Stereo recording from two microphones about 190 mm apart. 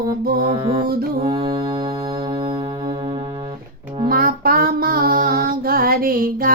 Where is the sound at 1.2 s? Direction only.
25° right (ahead or behind).